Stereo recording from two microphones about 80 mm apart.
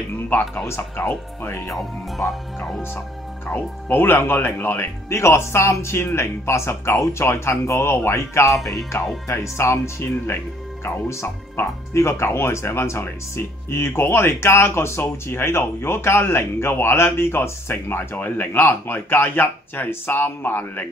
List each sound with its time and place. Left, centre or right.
0.7 s speech: left
2.1 s speech: centre
3.4 s speech: left